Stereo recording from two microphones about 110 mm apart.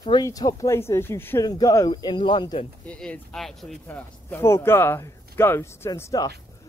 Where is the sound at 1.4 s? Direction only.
35° left (ahead or behind).